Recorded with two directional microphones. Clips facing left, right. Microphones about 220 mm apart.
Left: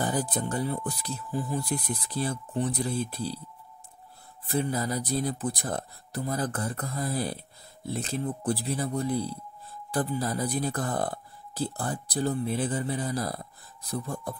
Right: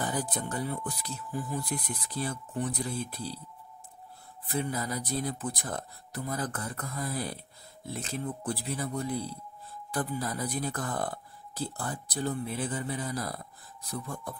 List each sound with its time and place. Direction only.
0.0 s speech: 30° left (ahead or behind)
4.5 s speech: 35° left (ahead or behind)